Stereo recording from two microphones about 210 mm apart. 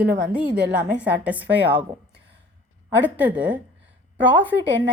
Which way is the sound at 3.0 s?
10° right (ahead or behind).